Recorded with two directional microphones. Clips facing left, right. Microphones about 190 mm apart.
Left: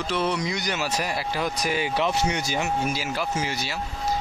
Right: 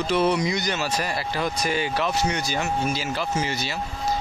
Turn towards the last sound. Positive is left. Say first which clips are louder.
# right 2 dB
turn(degrees=10)  # may be behind; listen again after turning